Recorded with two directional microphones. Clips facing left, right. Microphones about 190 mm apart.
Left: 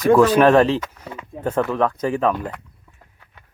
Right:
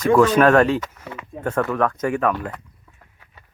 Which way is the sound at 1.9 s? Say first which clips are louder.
Left 1 dB; 30° left (ahead or behind).